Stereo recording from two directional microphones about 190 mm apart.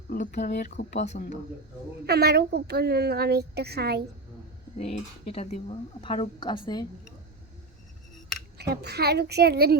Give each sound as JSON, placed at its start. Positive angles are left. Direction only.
{"t": 0.1, "sound": "speech", "side_deg": 45}
{"t": 2.0, "sound": "a woman's voice", "side_deg": -60}
{"t": 4.8, "sound": "speech", "side_deg": 35}
{"t": 8.5, "sound": "a woman's voice", "side_deg": -55}